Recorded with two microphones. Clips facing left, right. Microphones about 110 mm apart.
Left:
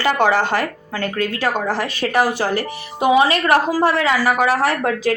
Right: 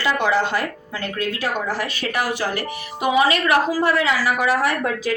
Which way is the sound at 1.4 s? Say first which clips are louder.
Left 4 dB; 35° left (ahead or behind).